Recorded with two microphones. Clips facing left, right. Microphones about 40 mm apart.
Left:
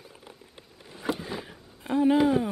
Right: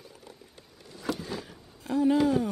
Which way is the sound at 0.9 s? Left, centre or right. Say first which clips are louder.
Left 2 dB; left.